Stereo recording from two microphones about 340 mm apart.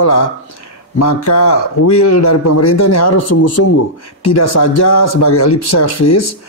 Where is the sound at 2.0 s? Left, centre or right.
Left.